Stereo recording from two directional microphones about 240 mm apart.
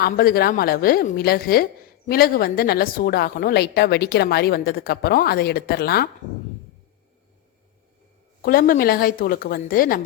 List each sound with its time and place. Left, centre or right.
0.0 s a woman's voice: left
8.4 s a woman's voice: left